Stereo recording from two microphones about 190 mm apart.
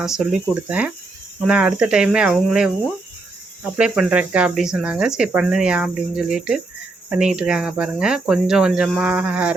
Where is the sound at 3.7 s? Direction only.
5° right (ahead or behind).